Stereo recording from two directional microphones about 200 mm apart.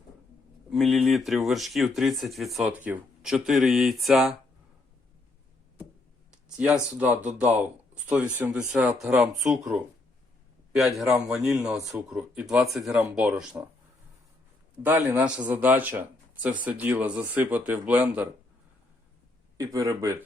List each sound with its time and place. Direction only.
0.7 s speech: centre (ahead or behind)
6.6 s speech: 5° right (ahead or behind)
14.8 s speech: 10° right (ahead or behind)
19.5 s speech: 15° right (ahead or behind)